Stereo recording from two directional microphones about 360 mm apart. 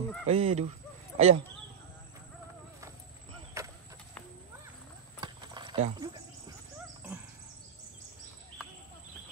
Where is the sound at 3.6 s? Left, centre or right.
Centre.